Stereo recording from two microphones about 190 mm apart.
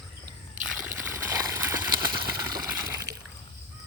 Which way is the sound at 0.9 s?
15° right (ahead or behind).